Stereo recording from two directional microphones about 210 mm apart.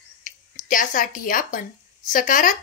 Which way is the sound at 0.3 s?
35° left (ahead or behind).